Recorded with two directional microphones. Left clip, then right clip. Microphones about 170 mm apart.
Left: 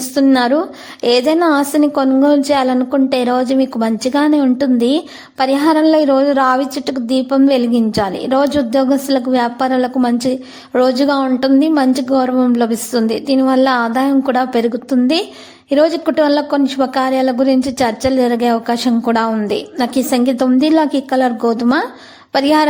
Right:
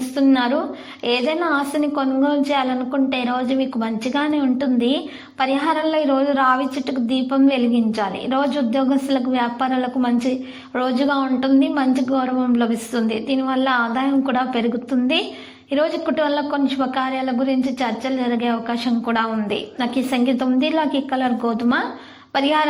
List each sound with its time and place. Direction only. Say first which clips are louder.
0.2 s a woman's voice: left 6 dB; 45° left (ahead or behind)